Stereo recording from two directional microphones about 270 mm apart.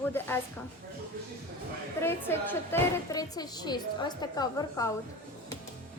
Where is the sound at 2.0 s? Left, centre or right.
Centre.